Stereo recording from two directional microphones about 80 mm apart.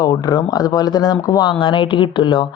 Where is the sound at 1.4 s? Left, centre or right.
Left.